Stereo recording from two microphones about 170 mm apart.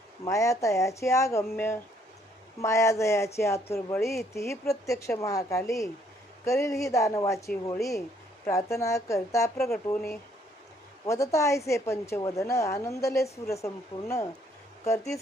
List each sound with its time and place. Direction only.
0.2 s a woman's voice: 20° left (ahead or behind)
11.1 s a woman's voice: 15° left (ahead or behind)